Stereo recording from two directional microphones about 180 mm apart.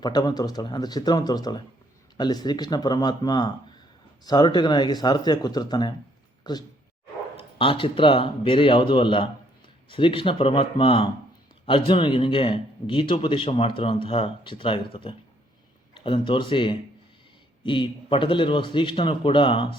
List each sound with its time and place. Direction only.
0.0 s a man's voice: 25° left (ahead or behind)